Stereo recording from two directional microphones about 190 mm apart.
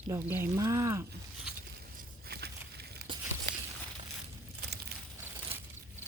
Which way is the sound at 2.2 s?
55° right (ahead or behind).